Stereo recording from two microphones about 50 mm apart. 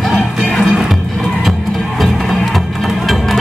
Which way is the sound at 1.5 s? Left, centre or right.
Centre.